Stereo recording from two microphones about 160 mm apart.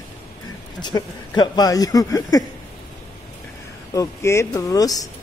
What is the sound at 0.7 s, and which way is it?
Speech, 25° left (ahead or behind).